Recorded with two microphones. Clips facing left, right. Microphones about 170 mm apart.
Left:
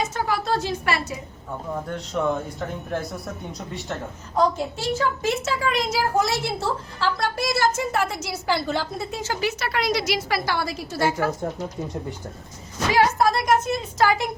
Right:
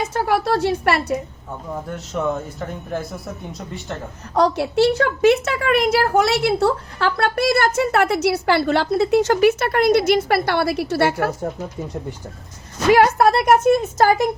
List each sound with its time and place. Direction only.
0.0 s a woman's voice: 60° right (ahead or behind)
1.7 s speech: 5° right (ahead or behind)
4.4 s a woman's voice: 75° right (ahead or behind)
12.9 s a woman's voice: 60° right (ahead or behind)